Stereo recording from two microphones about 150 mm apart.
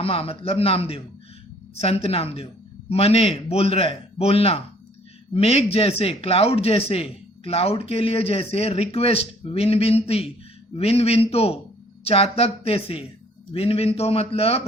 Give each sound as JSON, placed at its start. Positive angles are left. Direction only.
{"t": 0.0, "sound": "a man's voice", "side_deg": 40}